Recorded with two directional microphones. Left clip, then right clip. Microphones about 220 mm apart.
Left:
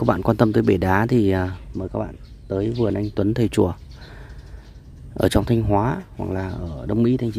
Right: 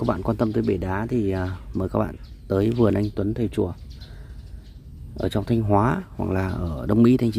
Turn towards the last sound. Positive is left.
turn(degrees=-5)  # may be behind; listen again after turning